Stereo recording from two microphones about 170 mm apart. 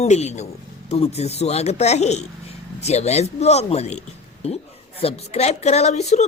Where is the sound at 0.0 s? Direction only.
40° left (ahead or behind).